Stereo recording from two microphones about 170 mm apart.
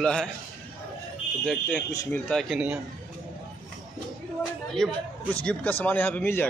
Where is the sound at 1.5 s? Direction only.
5° left (ahead or behind).